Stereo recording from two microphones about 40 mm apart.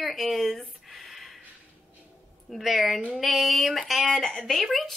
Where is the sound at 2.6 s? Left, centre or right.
Centre.